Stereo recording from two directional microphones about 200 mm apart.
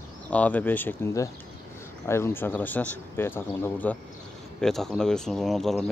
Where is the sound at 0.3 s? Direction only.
5° left (ahead or behind).